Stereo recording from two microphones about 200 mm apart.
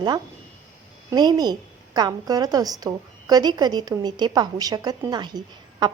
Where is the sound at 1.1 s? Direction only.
20° right (ahead or behind).